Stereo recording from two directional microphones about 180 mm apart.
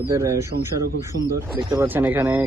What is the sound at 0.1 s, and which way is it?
Speech, 15° right (ahead or behind).